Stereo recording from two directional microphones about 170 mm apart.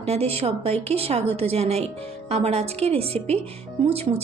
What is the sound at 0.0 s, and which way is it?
A woman's voice, 35° right (ahead or behind).